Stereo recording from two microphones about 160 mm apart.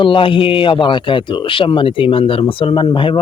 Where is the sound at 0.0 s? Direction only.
35° left (ahead or behind).